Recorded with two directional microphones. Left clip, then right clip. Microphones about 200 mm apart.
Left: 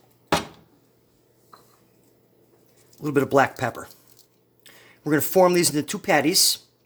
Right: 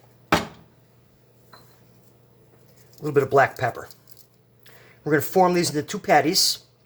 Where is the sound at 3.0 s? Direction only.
40° left (ahead or behind).